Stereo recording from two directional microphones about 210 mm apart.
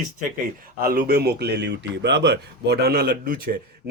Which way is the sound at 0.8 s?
45° right (ahead or behind).